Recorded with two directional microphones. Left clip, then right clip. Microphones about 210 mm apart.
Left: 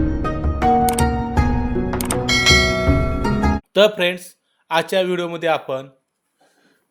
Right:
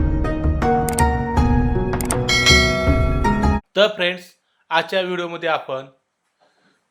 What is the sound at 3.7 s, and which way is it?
Speech, 35° left (ahead or behind).